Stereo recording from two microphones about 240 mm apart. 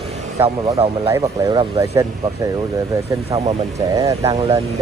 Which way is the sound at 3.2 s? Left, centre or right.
Right.